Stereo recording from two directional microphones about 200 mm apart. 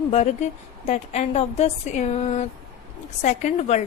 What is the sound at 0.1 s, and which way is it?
A woman's voice, 35° left (ahead or behind).